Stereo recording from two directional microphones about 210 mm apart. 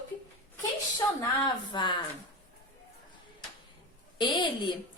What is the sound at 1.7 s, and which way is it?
Speech, 20° left (ahead or behind).